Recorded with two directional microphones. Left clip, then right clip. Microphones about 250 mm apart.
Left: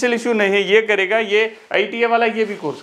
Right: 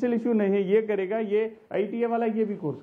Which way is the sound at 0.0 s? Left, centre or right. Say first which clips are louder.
Left 9 dB; centre.